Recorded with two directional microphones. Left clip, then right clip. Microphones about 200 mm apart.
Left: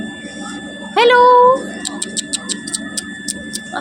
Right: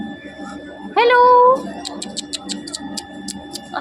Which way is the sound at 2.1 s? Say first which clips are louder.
Left 4 dB; centre (ahead or behind).